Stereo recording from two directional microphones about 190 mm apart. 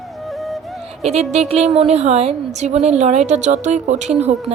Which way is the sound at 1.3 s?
35° right (ahead or behind).